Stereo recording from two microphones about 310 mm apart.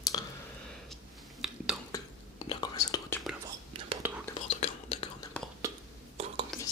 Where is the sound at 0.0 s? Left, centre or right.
Centre.